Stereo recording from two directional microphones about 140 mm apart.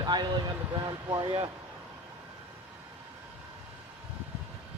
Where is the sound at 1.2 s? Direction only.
40° right (ahead or behind).